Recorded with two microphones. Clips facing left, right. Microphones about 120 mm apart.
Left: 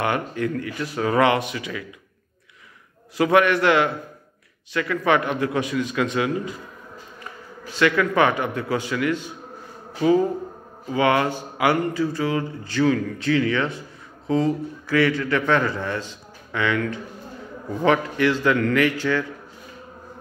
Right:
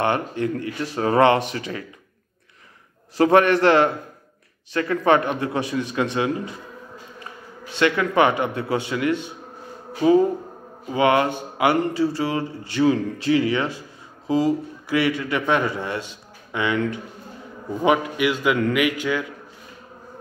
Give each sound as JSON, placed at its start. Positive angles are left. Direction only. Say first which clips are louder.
{"t": 0.0, "sound": "speech", "louder": "right 2 dB", "side_deg": -30}
{"t": 3.2, "sound": "speech", "louder": "right 2 dB", "side_deg": -40}
{"t": 7.7, "sound": "speech", "louder": "even", "side_deg": -25}
{"t": 10.9, "sound": "a man's voice", "louder": "right 1 dB", "side_deg": -20}